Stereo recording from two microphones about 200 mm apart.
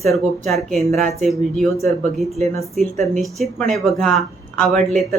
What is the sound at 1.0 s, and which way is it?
Speech, 35° right (ahead or behind).